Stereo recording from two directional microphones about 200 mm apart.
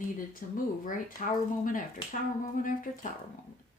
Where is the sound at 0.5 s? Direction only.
45° left (ahead or behind).